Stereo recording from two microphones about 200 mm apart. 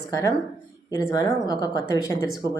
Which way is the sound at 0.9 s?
20° left (ahead or behind).